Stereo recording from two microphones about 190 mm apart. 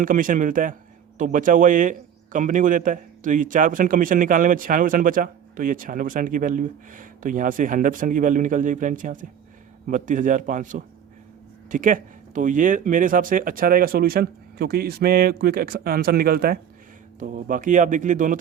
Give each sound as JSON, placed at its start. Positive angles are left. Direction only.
{"t": 0.0, "sound": "a man's voice", "side_deg": -45}